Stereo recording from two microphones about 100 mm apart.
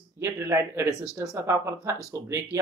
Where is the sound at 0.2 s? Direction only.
25° right (ahead or behind).